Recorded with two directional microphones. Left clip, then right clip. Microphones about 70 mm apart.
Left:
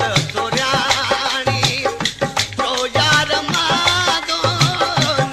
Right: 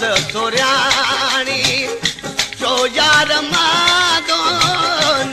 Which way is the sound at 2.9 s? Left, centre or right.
Left.